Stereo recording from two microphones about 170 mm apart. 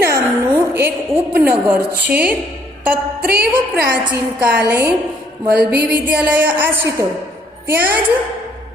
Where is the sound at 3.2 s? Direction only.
65° right (ahead or behind).